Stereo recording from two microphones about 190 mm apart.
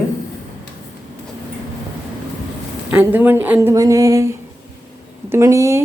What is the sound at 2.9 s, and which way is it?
Speech, 10° right (ahead or behind).